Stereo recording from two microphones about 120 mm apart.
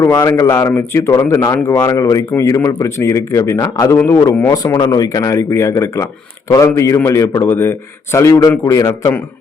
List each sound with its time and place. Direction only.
0.0 s speech: 25° left (ahead or behind)
4.5 s speech: 30° left (ahead or behind)